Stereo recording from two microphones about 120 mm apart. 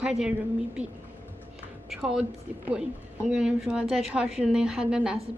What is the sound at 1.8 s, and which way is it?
A woman's voice, 5° right (ahead or behind).